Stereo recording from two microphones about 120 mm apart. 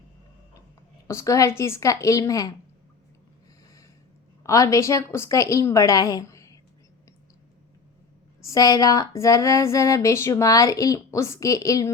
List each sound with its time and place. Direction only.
1.0 s speech: 25° left (ahead or behind)
4.4 s speech: 25° left (ahead or behind)
8.4 s speech: 30° left (ahead or behind)